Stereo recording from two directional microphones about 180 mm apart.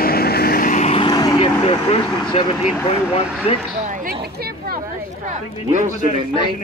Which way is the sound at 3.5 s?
35° left (ahead or behind).